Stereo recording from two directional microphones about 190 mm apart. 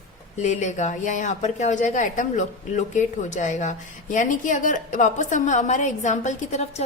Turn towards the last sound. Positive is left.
turn(degrees=35)  # may be behind; listen again after turning